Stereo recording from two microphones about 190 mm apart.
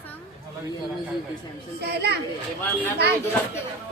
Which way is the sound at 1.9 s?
60° right (ahead or behind).